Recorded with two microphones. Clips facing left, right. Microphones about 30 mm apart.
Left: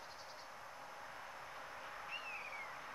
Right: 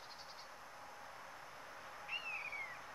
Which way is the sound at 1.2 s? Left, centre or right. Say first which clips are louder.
Left 3 dB; centre.